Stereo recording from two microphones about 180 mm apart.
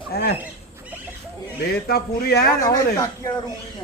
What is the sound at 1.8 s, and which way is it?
Speech, 60° left (ahead or behind).